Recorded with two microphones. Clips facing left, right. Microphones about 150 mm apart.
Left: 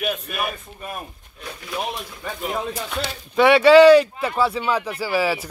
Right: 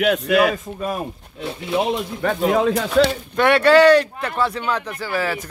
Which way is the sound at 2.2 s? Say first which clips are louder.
Right 10 dB; 75° right (ahead or behind).